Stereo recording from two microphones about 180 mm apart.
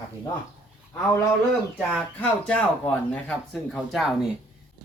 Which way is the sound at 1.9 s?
5° left (ahead or behind).